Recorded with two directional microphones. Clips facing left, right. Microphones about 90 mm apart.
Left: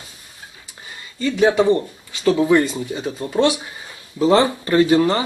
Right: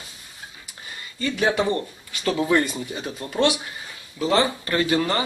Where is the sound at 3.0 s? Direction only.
25° left (ahead or behind).